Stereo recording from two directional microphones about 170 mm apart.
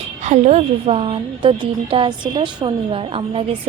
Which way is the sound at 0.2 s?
40° right (ahead or behind).